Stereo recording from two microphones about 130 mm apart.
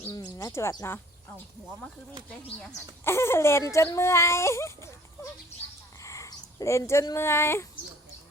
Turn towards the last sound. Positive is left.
turn(degrees=20)  # may be behind; listen again after turning